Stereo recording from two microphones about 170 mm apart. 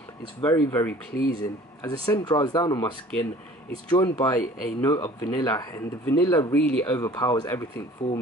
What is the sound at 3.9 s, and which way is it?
Speech, 20° left (ahead or behind).